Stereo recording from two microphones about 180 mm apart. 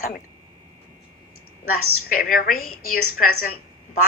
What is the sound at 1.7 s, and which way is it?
A woman's voice, 55° left (ahead or behind).